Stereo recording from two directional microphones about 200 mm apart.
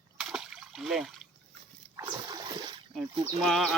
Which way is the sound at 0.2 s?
Centre (ahead or behind).